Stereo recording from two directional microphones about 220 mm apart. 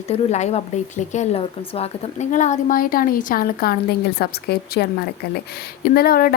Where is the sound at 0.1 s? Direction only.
30° left (ahead or behind).